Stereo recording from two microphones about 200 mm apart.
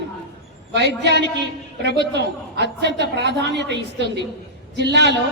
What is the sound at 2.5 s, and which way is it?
A woman's voice, 55° right (ahead or behind).